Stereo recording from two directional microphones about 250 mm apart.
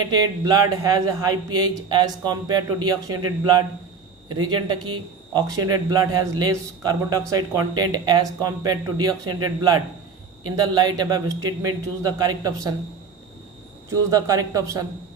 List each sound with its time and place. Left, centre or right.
0.0 s speech: centre
4.3 s speech: centre
14.1 s speech: centre